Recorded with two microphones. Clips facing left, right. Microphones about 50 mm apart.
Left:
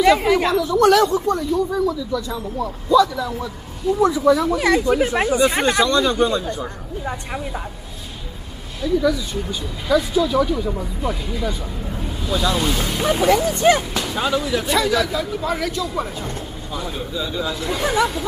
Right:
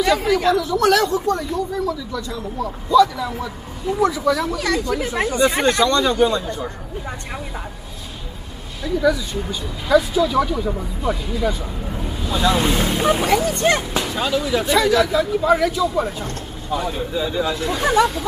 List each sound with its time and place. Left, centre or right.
0.0 s speech: centre
0.6 s speech: centre
4.1 s speech: centre
4.6 s speech: centre
5.9 s speech: centre
8.8 s speech: centre
17.6 s speech: centre